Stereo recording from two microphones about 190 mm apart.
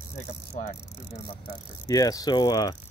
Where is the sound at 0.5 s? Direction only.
35° left (ahead or behind).